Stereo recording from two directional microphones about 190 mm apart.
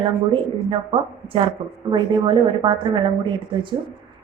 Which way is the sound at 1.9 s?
25° right (ahead or behind).